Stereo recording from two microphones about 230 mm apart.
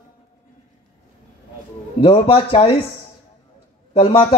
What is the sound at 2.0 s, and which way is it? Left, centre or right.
Speech, left.